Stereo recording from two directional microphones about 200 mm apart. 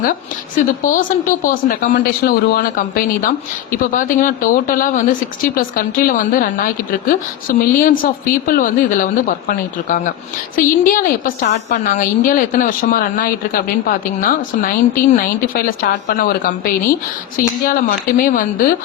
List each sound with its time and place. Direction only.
0.0 s speech: 45° left (ahead or behind)